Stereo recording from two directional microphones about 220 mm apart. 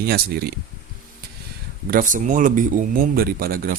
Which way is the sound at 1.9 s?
35° right (ahead or behind).